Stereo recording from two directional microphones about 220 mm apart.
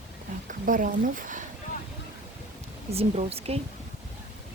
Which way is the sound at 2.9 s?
25° right (ahead or behind).